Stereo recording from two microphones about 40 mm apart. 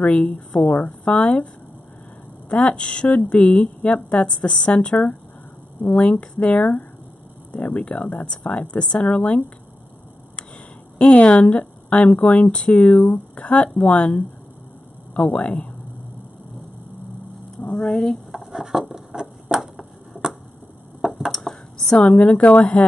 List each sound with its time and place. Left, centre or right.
0.0 s a woman's voice: left
2.5 s a woman's voice: left
5.9 s speech: left
7.8 s a woman's voice: left
11.0 s a woman's voice: left
13.1 s speech: left
13.5 s a woman's voice: left
15.2 s a woman's voice: left
17.7 s speech: centre
18.5 s a sound: centre
21.0 s a sound: centre
21.3 s a sound: centre
22.2 s speech: left